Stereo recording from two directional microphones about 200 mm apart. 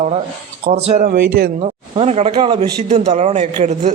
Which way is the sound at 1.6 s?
30° right (ahead or behind).